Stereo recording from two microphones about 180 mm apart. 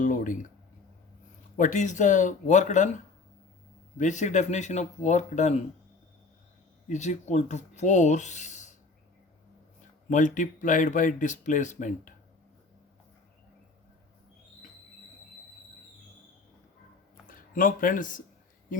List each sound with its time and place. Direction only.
0.0 s speech: 45° left (ahead or behind)
1.5 s speech: 45° left (ahead or behind)
3.9 s speech: 40° left (ahead or behind)
6.8 s speech: 40° left (ahead or behind)
10.1 s speech: 45° left (ahead or behind)
17.2 s speech: 50° left (ahead or behind)